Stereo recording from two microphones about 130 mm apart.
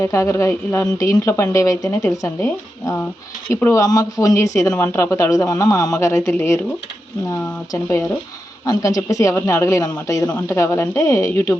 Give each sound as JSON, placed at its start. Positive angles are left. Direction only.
{"t": 0.0, "sound": "speech", "side_deg": 20}
{"t": 7.7, "sound": "speech", "side_deg": 25}